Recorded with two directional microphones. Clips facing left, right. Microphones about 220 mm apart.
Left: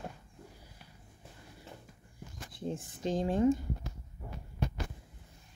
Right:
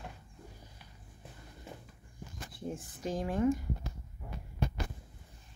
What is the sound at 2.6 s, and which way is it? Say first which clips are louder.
Speech: left 3 dB; 25° left (ahead or behind).